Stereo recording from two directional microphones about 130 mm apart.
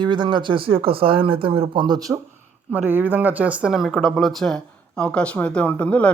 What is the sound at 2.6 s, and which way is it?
A woman's voice, 15° right (ahead or behind).